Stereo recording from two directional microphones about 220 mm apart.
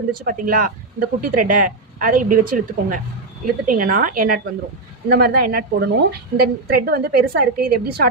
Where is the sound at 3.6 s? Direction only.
40° right (ahead or behind).